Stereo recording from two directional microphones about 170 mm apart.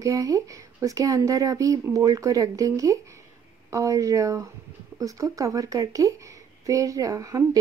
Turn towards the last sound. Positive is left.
turn(degrees=-20)  # may be behind; listen again after turning